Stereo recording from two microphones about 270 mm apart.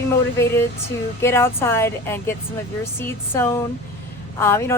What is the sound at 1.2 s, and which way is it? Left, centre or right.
Speech, centre.